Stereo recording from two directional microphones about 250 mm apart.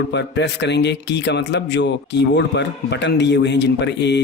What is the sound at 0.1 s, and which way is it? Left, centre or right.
A man's voice, left.